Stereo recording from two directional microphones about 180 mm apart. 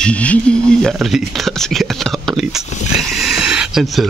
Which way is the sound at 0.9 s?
Centre (ahead or behind).